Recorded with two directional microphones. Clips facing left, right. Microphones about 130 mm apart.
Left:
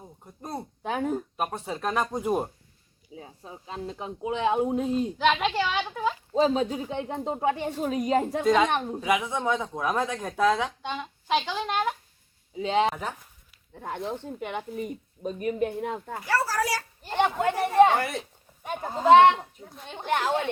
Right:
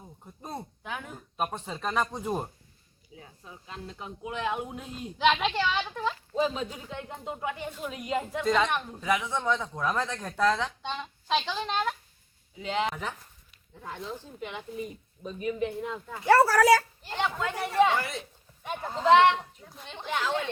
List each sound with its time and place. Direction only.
0.8 s a sound: 35° left (ahead or behind)
1.4 s speech: 5° left (ahead or behind)
3.2 s speech: 30° left (ahead or behind)
5.1 s speech: centre (ahead or behind)
6.3 s speech: 30° left (ahead or behind)
8.4 s speech: 5° left (ahead or behind)
12.5 s speech: 30° left (ahead or behind)
12.9 s speech: 40° left (ahead or behind)
13.7 s speech: 55° left (ahead or behind)
16.3 s speech: 65° right (ahead or behind)
17.0 s speech: 50° left (ahead or behind)